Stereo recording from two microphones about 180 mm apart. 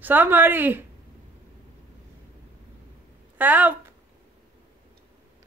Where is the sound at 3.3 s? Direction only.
10° right (ahead or behind).